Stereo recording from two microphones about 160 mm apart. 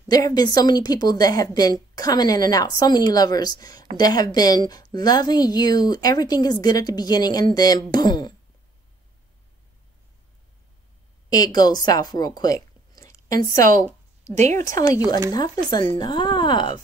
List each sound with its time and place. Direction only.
0.1 s a woman's voice: 25° left (ahead or behind)
11.2 s speech: 25° left (ahead or behind)
14.3 s speech: 50° right (ahead or behind)
14.7 s a woman's voice: 20° left (ahead or behind)